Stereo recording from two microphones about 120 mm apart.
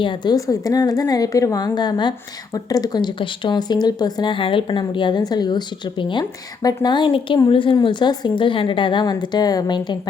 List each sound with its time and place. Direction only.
0.0 s a woman's voice: 45° left (ahead or behind)
0.3 s a woman's voice: 30° left (ahead or behind)